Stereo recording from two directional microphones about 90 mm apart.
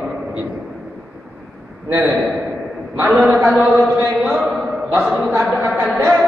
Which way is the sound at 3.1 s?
Centre (ahead or behind).